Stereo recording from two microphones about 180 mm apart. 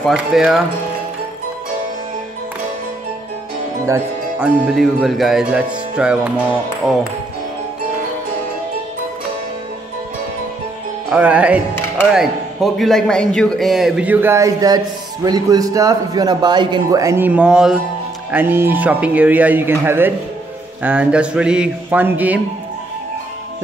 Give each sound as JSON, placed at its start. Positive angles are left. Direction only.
{"t": 0.0, "sound": "speech", "side_deg": 0}
{"t": 3.8, "sound": "speech", "side_deg": -10}
{"t": 11.1, "sound": "a man's voice", "side_deg": -5}